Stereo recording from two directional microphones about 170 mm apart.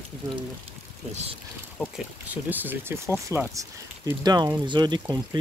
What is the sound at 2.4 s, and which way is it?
Speech, 10° right (ahead or behind).